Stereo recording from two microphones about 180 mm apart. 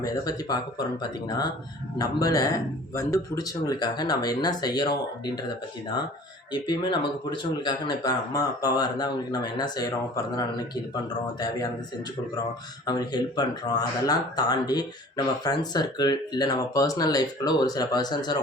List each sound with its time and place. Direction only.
0.0 s speech: 20° left (ahead or behind)
6.5 s speech: 25° left (ahead or behind)
12.8 s speech: 20° left (ahead or behind)